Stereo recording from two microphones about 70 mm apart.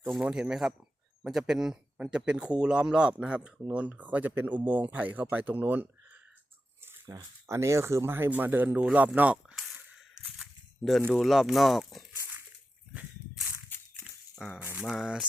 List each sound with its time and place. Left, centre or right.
0.2 s a man's voice: centre; by 5.9 s right
7.1 s speech: right; by 9.6 s centre
11.1 s speech: centre
14.3 s a man's voice: centre